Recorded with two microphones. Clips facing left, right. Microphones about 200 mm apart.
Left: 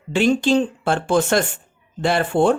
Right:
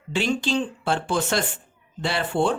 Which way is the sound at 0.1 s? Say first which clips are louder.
Left 7 dB; 50° left (ahead or behind).